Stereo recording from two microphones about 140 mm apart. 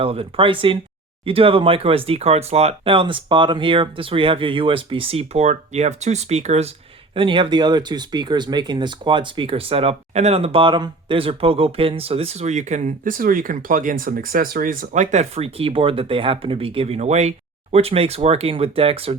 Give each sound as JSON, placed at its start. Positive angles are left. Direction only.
{"t": 0.0, "sound": "speech", "side_deg": -40}
{"t": 7.2, "sound": "speech", "side_deg": -35}